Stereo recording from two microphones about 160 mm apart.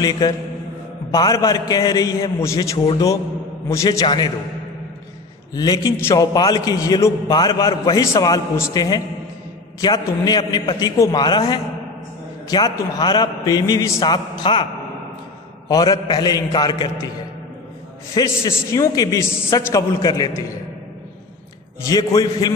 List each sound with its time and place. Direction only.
0.2 s a man's voice: 25° left (ahead or behind)
5.5 s a man's voice: 25° left (ahead or behind)
15.7 s a man's voice: 25° left (ahead or behind)
18.1 s a man's voice: 20° left (ahead or behind)
21.8 s a man's voice: 20° left (ahead or behind)